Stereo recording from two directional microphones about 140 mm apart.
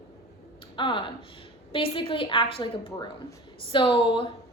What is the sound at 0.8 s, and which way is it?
A woman's voice, 35° left (ahead or behind).